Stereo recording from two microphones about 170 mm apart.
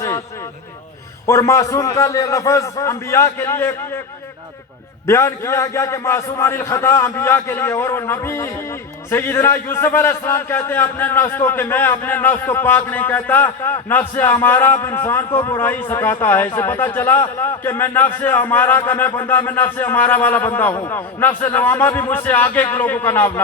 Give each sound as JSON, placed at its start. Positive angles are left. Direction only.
{"t": 1.3, "sound": "speech", "side_deg": 20}
{"t": 5.0, "sound": "speech", "side_deg": 15}